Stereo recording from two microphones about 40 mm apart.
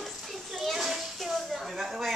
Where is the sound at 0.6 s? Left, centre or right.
Centre.